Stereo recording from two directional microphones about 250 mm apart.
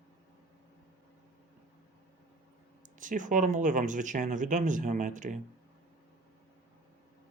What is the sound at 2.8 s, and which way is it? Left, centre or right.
Speech, right.